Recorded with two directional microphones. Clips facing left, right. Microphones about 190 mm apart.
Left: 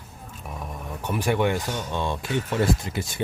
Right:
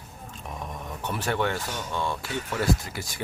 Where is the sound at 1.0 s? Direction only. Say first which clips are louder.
Left 4 dB; 10° left (ahead or behind).